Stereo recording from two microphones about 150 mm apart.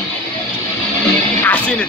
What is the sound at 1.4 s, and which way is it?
Speech, 10° left (ahead or behind).